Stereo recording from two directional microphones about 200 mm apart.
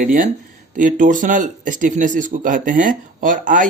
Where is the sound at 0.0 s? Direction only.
40° right (ahead or behind).